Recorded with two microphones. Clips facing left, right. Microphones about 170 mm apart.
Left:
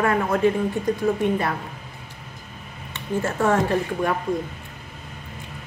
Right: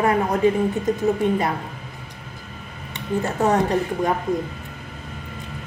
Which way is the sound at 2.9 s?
20° right (ahead or behind).